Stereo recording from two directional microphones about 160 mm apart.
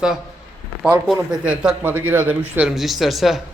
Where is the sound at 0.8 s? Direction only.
5° right (ahead or behind).